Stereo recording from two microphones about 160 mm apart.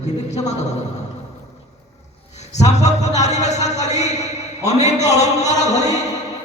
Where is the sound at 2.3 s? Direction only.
45° left (ahead or behind).